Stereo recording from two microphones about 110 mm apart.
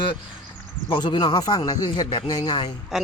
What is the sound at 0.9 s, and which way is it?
Speech, 45° left (ahead or behind).